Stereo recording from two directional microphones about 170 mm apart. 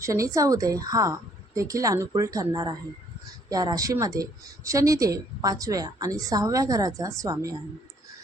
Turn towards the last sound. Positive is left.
turn(degrees=-20)  # may be behind; listen again after turning